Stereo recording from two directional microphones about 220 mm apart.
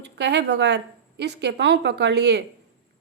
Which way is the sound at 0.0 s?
50° right (ahead or behind).